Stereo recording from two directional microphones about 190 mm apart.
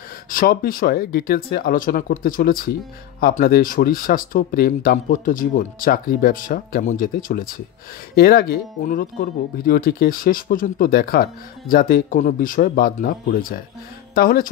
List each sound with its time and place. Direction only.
0.3 s speech: 45° left (ahead or behind)